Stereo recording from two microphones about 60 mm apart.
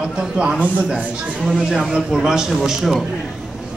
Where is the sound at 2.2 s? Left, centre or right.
Centre.